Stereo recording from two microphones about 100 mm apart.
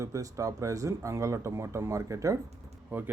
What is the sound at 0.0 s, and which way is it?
Speech, 35° right (ahead or behind).